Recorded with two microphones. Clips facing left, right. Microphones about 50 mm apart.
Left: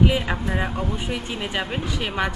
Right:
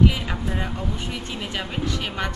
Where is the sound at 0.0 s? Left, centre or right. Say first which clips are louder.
Left 1 dB; centre.